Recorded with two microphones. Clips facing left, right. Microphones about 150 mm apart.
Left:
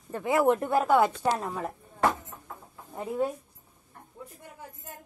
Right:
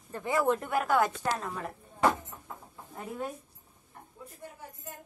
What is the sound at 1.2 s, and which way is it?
Child singing, 15° left (ahead or behind).